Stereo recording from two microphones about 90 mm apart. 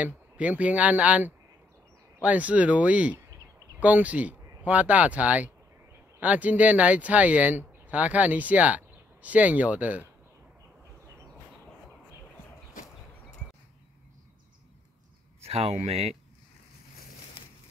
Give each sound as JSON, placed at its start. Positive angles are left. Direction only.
{"t": 0.0, "sound": "speech", "side_deg": -15}